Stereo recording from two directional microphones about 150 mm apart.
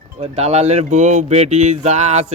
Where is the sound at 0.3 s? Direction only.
45° right (ahead or behind).